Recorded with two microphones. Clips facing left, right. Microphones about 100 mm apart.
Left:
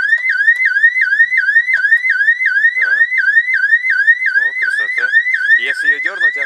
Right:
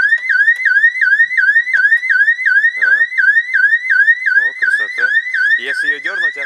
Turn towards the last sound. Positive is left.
turn(degrees=5)  # may be behind; listen again after turning